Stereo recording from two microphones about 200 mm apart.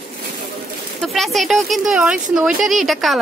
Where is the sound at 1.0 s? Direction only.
Centre (ahead or behind).